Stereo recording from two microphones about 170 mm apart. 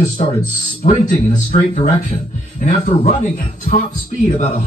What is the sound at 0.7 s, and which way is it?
A man's voice, 45° left (ahead or behind).